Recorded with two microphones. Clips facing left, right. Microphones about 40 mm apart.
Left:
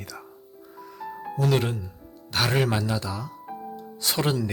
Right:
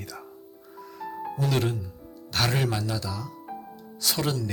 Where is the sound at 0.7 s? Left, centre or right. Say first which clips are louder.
Right 1 dB; centre.